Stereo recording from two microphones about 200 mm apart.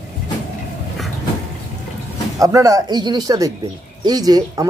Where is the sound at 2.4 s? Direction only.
15° right (ahead or behind).